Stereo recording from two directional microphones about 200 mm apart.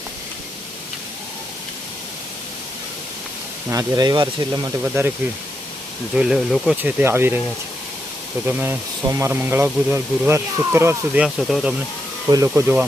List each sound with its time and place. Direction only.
3.7 s speech: 20° right (ahead or behind)
6.1 s speech: 5° right (ahead or behind)
8.4 s speech: 10° right (ahead or behind)
12.3 s speech: 15° right (ahead or behind)